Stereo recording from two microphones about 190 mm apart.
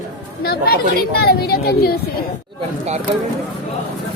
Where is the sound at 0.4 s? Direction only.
55° left (ahead or behind).